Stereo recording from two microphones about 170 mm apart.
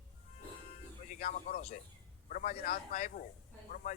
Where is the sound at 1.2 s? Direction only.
55° left (ahead or behind).